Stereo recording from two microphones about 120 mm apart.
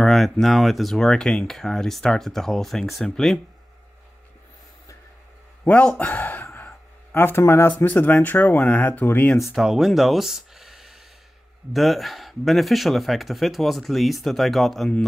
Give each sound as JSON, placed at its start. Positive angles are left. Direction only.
{"t": 0.0, "sound": "speech", "side_deg": 0}
{"t": 5.7, "sound": "speech", "side_deg": 10}
{"t": 9.5, "sound": "speech", "side_deg": -5}